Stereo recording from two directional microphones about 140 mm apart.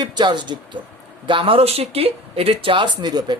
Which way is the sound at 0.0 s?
30° right (ahead or behind).